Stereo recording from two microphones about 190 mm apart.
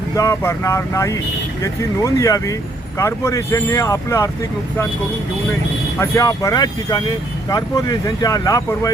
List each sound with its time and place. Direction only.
0.2 s speech: 15° left (ahead or behind)
6.0 s speech: 15° left (ahead or behind)